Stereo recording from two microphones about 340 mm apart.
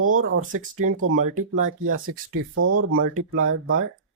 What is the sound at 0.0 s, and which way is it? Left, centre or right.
Speech, right.